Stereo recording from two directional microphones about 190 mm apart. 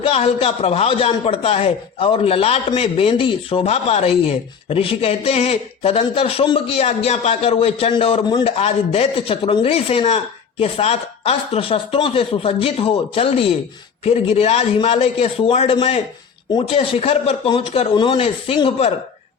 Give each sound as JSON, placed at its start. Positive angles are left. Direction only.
{"t": 0.0, "sound": "a man's voice", "side_deg": 30}